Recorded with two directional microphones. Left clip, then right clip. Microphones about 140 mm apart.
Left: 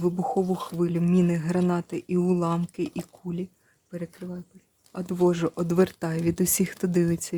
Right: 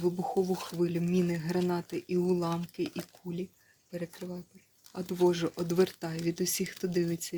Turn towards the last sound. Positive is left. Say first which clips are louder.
# left 6 dB
turn(degrees=50)  # may be behind; listen again after turning